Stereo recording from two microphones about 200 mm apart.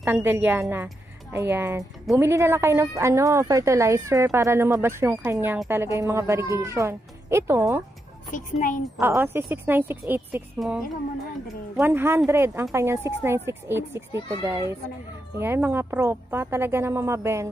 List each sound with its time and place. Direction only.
0.0 s a woman's voice: 10° right (ahead or behind)
8.3 s speech: 40° left (ahead or behind)
9.0 s a woman's voice: 10° right (ahead or behind)
11.8 s a woman's voice: 10° right (ahead or behind)